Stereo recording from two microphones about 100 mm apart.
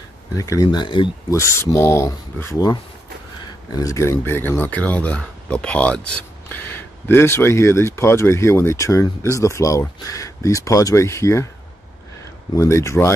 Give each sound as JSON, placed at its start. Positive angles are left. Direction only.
{"t": 0.4, "sound": "speech", "side_deg": 35}
{"t": 0.7, "sound": "speech", "side_deg": 50}
{"t": 1.3, "sound": "speech", "side_deg": 30}
{"t": 3.7, "sound": "speech", "side_deg": 35}
{"t": 12.5, "sound": "speech", "side_deg": 30}